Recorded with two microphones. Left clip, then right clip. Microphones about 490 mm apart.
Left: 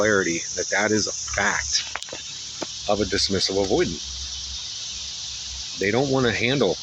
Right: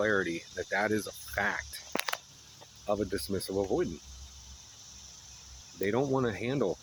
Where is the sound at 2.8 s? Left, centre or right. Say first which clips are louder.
Left 10 dB; right.